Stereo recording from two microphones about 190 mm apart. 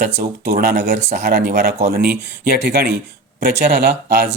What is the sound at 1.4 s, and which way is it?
Speech, 55° right (ahead or behind).